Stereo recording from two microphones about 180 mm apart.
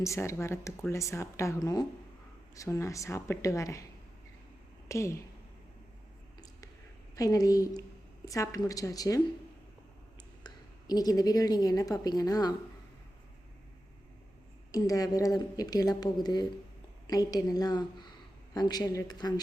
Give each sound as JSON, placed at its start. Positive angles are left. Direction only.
{"t": 0.0, "sound": "speech", "side_deg": 15}
{"t": 4.9, "sound": "speech", "side_deg": 15}
{"t": 7.2, "sound": "a woman's voice", "side_deg": 20}
{"t": 10.4, "sound": "a woman's voice", "side_deg": 20}
{"t": 14.7, "sound": "a woman's voice", "side_deg": 20}